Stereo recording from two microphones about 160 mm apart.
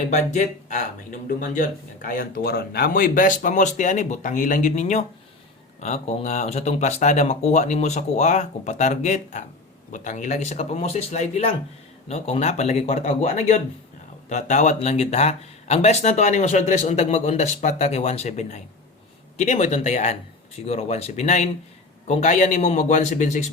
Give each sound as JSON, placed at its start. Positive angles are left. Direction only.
{"t": 0.1, "sound": "speech", "side_deg": 50}